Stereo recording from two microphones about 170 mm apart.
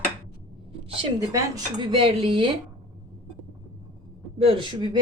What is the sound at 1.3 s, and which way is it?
A woman's voice, 25° right (ahead or behind).